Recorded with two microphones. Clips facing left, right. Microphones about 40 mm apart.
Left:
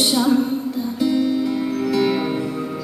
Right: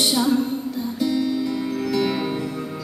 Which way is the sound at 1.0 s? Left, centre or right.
Left.